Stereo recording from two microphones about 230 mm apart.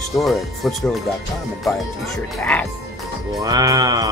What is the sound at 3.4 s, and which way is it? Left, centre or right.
Speech, centre.